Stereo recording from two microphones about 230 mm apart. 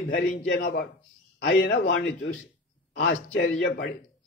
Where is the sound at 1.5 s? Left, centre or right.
Left.